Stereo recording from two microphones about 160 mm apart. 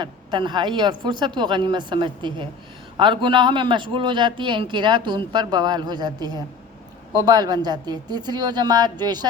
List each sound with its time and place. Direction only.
0.0 s a man's voice: 30° right (ahead or behind)